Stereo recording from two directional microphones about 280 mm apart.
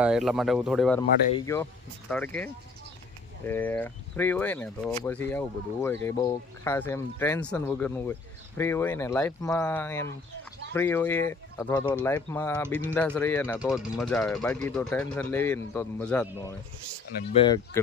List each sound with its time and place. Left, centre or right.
0.0 s speech: centre
17.3 s speech: centre